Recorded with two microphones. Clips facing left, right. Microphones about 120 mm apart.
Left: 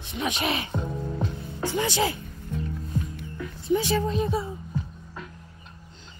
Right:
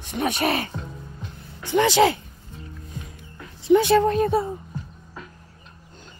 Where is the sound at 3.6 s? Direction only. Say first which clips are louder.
Right 8 dB; 65° right (ahead or behind).